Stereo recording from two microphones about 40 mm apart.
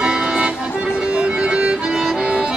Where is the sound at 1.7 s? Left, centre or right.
Centre.